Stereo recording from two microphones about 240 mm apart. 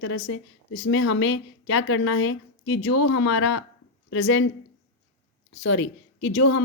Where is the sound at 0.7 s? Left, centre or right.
Left.